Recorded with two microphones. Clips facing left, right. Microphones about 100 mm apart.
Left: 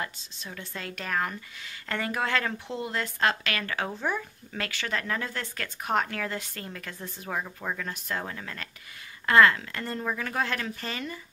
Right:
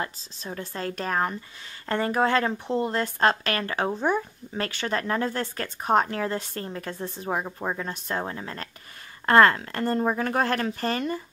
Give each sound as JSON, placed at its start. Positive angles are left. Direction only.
{"t": 0.0, "sound": "speech", "side_deg": -35}
{"t": 9.2, "sound": "a woman's voice", "side_deg": -40}